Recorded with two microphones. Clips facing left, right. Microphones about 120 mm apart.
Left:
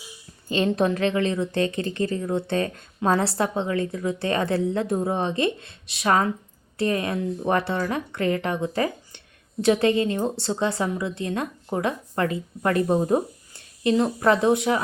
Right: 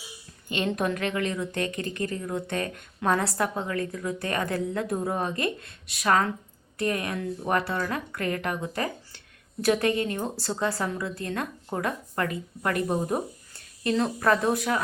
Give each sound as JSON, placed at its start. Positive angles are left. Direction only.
{"t": 0.4, "sound": "a woman's voice", "side_deg": 35}